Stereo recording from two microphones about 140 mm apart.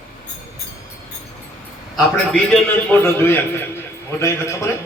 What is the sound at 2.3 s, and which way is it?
A man's voice, 10° left (ahead or behind).